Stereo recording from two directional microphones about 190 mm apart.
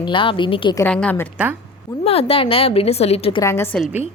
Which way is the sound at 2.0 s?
30° left (ahead or behind).